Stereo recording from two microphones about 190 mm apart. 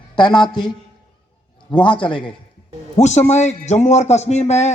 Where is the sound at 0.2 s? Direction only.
20° left (ahead or behind).